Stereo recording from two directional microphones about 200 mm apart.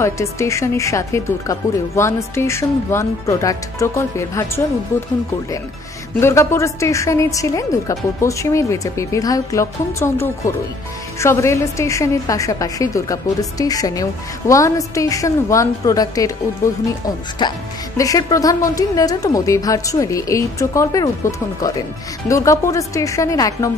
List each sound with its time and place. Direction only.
0.0 s a woman's voice: 15° left (ahead or behind)
6.2 s a woman's voice: 15° left (ahead or behind)